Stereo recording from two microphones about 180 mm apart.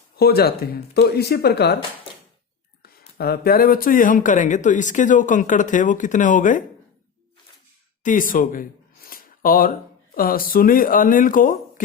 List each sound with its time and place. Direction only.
0.2 s speech: 60° left (ahead or behind)
2.8 s speech: 60° left (ahead or behind); by 6.6 s 45° left (ahead or behind)
8.0 s a sound: 50° left (ahead or behind)
10.2 s speech: 55° left (ahead or behind)